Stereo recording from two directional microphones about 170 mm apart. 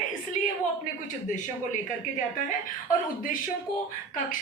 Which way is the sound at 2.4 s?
50° left (ahead or behind).